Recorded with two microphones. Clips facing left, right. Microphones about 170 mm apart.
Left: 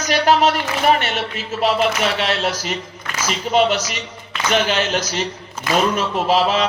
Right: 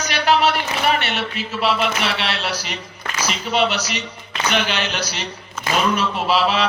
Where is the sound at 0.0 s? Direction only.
45° left (ahead or behind).